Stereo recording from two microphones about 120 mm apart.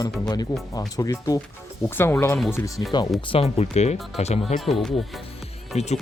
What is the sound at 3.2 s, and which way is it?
Speech, 55° left (ahead or behind).